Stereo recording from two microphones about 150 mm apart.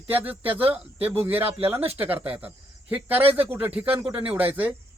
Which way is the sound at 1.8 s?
40° right (ahead or behind).